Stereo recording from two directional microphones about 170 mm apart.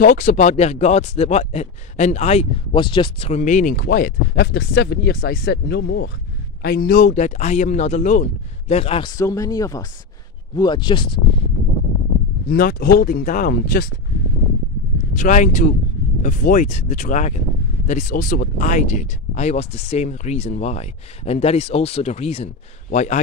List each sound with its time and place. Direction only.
0.0 s speech: 50° left (ahead or behind); by 6.1 s 75° left (ahead or behind)
6.6 s speech: 60° left (ahead or behind); by 9.1 s 35° left (ahead or behind)
9.1 s speech: 20° left (ahead or behind)
12.4 s speech: 60° left (ahead or behind)
15.1 s speech: 50° left (ahead or behind)